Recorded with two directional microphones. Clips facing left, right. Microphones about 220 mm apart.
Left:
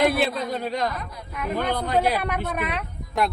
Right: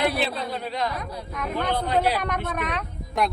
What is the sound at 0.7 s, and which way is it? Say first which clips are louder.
Speech: even; 45° left (ahead or behind).